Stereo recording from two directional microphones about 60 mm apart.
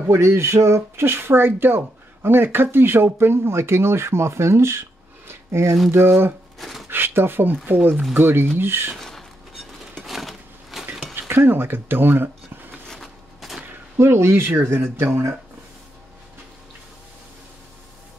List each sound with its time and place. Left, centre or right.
0.1 s speech: right
5.9 s speech: right
6.6 s a sound: centre
6.9 s speech: right
8.9 s a sound: centre
11.1 s speech: right
12.8 s a sound: centre
13.9 s speech: right
14.6 s speech: right